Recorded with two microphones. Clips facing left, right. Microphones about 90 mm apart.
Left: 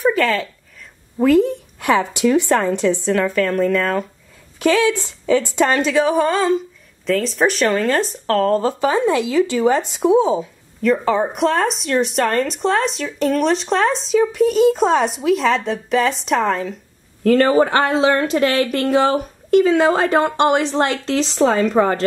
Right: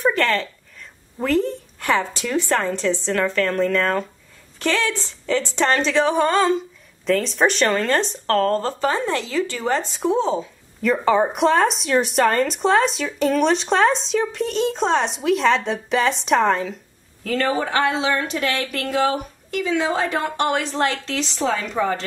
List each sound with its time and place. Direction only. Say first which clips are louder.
0.0 s a sound: left 3 dB; 5° left (ahead or behind)
1.2 s speech: left 6 dB; 15° left (ahead or behind)
10.8 s speech: left 1 dB; centre (ahead or behind)
17.2 s speech: left 8 dB; 45° left (ahead or behind)
18.6 s a woman's voice: left 8 dB; 20° left (ahead or behind)
18.9 s speech: left 2 dB; 40° left (ahead or behind)
20.2 s a woman's voice: left 6 dB; 25° left (ahead or behind)
21.2 s speech: left 8 dB; 45° left (ahead or behind)